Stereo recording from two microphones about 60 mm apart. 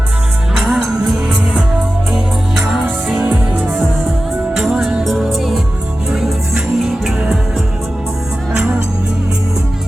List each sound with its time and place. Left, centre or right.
0.7 s music: centre
3.2 s music: right
4.5 s music: centre